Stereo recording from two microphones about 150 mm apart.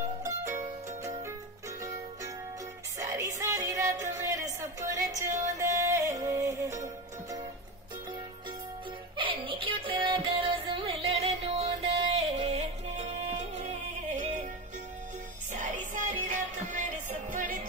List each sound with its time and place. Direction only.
3.0 s music: 20° right (ahead or behind)
9.1 s music: 35° right (ahead or behind)
15.5 s music: 55° right (ahead or behind)